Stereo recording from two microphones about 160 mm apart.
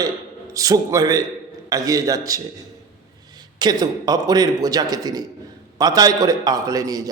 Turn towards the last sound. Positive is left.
turn(degrees=-25)  # may be behind; listen again after turning